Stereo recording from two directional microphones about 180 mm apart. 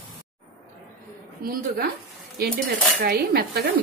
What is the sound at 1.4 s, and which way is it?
Speech, 55° right (ahead or behind).